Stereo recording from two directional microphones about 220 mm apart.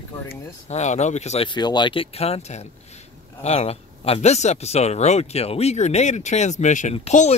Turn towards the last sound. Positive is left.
turn(degrees=30)  # may be behind; listen again after turning